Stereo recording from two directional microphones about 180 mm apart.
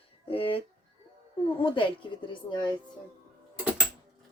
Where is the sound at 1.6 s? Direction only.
30° left (ahead or behind).